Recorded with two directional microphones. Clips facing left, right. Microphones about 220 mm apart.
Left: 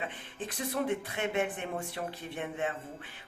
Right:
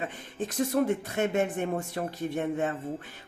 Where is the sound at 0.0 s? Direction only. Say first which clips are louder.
Right 5 dB; 45° right (ahead or behind).